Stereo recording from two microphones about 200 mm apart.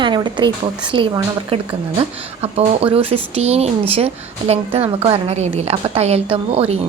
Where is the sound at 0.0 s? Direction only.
20° right (ahead or behind).